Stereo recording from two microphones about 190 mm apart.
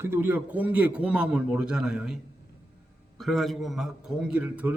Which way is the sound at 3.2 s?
Centre (ahead or behind).